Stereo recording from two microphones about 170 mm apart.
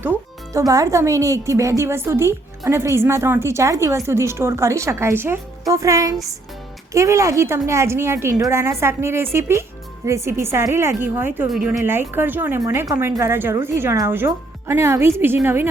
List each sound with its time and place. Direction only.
0.5 s a woman's voice: 20° right (ahead or behind)
11.5 s speech: centre (ahead or behind)
11.8 s a woman's voice: 15° right (ahead or behind)